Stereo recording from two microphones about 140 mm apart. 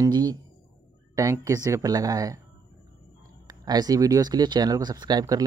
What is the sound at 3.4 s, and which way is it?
Speech, 30° right (ahead or behind).